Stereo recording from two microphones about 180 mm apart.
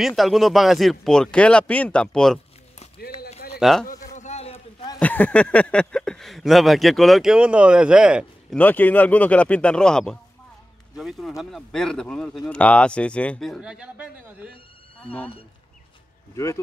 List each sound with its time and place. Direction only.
0.0 s speech: centre (ahead or behind)
3.5 s a man's voice: centre (ahead or behind)
4.0 s a sound: 40° left (ahead or behind)
4.9 s speech: 10° left (ahead or behind)
8.5 s speech: 10° left (ahead or behind); by 14.5 s 5° right (ahead or behind)